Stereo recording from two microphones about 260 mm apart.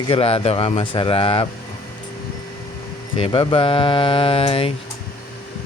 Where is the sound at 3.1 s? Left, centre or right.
Centre.